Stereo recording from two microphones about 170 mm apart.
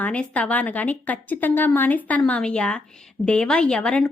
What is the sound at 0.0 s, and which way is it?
A woman's voice, 10° left (ahead or behind).